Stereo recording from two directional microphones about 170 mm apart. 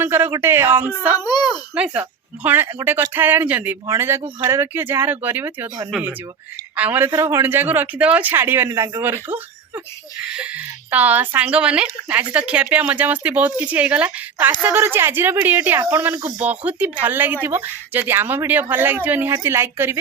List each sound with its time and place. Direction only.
0.0 s speech: 15° right (ahead or behind)
1.2 s a child's voice: 25° left (ahead or behind)
1.7 s speech: 5° right (ahead or behind)